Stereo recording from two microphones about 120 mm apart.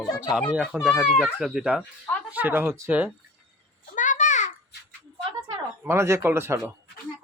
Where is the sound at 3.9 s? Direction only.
90° left.